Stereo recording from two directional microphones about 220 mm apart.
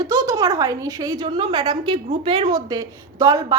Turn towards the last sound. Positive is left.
turn(degrees=-15)  # may be behind; listen again after turning